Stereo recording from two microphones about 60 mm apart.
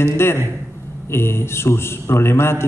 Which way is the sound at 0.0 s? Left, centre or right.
Left.